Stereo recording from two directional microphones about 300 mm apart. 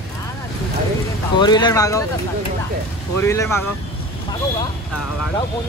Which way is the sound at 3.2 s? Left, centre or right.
Centre.